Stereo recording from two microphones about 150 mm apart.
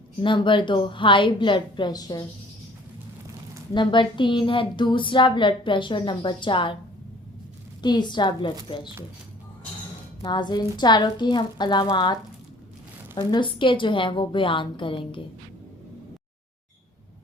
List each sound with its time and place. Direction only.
0.2 s speech: 35° left (ahead or behind)
3.8 s speech: 30° left (ahead or behind)
7.8 s a woman's voice: 30° left (ahead or behind)
10.2 s a woman's voice: 30° left (ahead or behind)
13.1 s speech: 35° left (ahead or behind)